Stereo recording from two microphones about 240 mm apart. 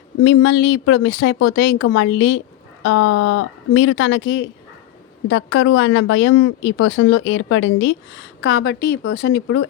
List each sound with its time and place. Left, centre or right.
0.3 s a woman's voice: left
1.8 s a woman's voice: left